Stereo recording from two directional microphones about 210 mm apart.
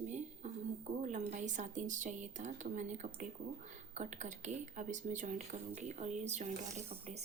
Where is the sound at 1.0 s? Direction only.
35° right (ahead or behind).